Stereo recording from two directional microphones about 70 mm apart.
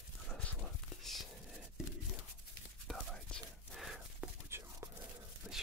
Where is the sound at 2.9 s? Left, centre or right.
Centre.